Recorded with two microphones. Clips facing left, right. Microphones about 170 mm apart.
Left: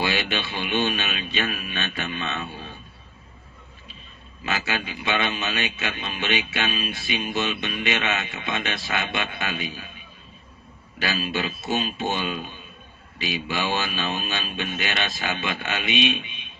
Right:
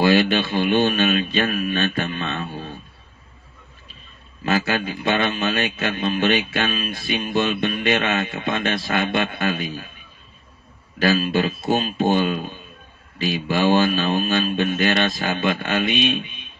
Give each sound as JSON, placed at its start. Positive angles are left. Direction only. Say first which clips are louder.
{"t": 0.0, "sound": "a man's voice", "louder": "right 9 dB", "side_deg": -45}
{"t": 4.5, "sound": "a man's voice", "louder": "right 7 dB", "side_deg": -45}
{"t": 11.0, "sound": "a man's voice", "louder": "right 8 dB", "side_deg": -45}